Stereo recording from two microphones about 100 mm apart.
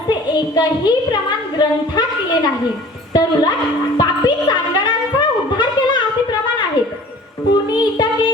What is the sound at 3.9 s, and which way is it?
Music, 45° left (ahead or behind).